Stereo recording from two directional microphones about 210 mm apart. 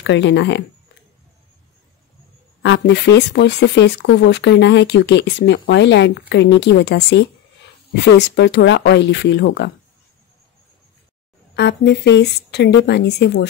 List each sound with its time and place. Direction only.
0.0 s speech: 55° left (ahead or behind)
2.6 s speech: 55° left (ahead or behind)
11.5 s a woman's voice: 55° left (ahead or behind)